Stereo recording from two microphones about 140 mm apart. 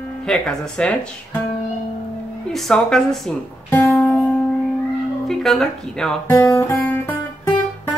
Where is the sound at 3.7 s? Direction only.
10° left (ahead or behind).